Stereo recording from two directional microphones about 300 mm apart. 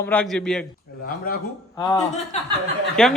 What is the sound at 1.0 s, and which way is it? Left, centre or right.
A woman's voice, left.